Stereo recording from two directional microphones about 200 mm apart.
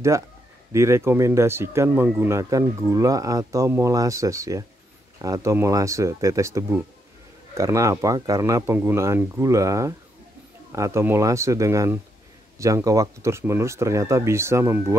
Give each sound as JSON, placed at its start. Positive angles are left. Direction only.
{"t": 0.7, "sound": "speech", "side_deg": -15}